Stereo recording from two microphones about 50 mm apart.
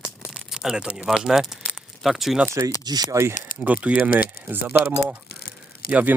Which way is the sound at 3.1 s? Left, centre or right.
Right.